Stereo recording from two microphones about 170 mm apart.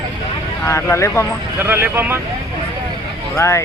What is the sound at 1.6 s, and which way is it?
Speech, 15° right (ahead or behind).